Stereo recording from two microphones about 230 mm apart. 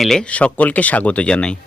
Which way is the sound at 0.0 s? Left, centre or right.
Centre.